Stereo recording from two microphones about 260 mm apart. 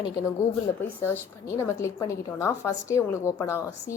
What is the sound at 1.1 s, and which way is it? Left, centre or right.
A woman's voice, centre.